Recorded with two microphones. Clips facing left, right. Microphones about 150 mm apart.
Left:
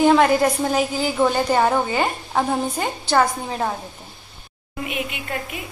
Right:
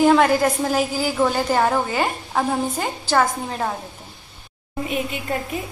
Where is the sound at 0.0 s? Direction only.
Centre (ahead or behind).